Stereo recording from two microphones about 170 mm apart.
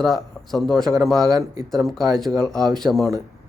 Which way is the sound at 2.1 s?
Centre (ahead or behind).